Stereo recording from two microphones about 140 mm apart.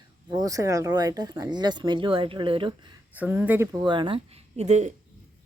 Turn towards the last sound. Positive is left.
turn(degrees=-55)  # may be behind; listen again after turning